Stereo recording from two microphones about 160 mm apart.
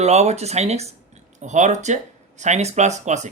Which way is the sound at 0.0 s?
45° right (ahead or behind).